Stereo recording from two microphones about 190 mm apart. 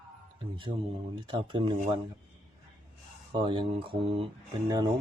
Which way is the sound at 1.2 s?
25° right (ahead or behind).